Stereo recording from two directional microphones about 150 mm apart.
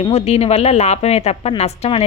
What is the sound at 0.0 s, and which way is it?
A woman's voice, 45° left (ahead or behind).